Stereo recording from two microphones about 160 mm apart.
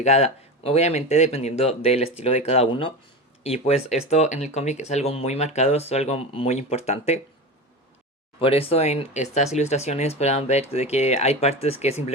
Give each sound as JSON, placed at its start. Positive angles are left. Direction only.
{"t": 0.0, "sound": "speech", "side_deg": 40}
{"t": 8.4, "sound": "speech", "side_deg": 35}